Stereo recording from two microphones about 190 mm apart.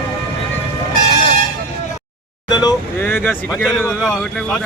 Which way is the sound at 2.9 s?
10° left (ahead or behind).